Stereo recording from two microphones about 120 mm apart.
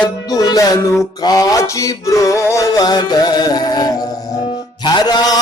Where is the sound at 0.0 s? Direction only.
35° left (ahead or behind).